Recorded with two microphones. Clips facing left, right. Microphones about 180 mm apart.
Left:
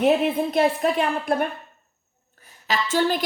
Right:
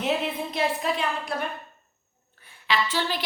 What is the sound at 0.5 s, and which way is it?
Speech, 50° left (ahead or behind).